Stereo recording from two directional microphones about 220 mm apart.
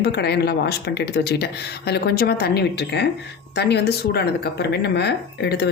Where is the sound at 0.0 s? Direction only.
50° left (ahead or behind).